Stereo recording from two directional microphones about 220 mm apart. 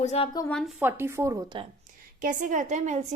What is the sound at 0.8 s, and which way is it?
Speech, 10° right (ahead or behind).